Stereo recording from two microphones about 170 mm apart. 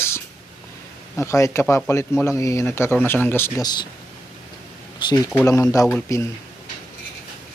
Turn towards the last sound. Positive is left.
turn(degrees=15)  # may be behind; listen again after turning